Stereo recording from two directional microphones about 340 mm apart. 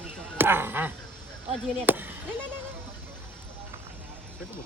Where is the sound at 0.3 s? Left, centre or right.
Centre.